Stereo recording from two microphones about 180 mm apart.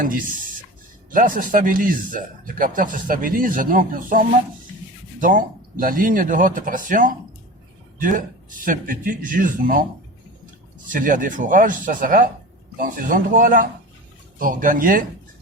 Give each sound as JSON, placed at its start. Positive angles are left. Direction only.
{"t": 0.0, "sound": "speech", "side_deg": -50}
{"t": 10.9, "sound": "speech", "side_deg": -50}